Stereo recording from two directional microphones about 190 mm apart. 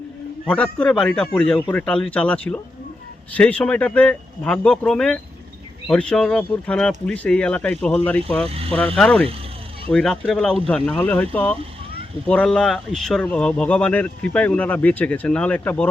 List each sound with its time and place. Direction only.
0.4 s speech: 5° left (ahead or behind)
8.4 s speech: 30° right (ahead or behind)
9.0 s speech: 5° left (ahead or behind)